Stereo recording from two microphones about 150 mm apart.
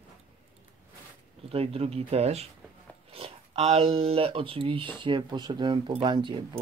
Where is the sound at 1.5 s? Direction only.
40° right (ahead or behind).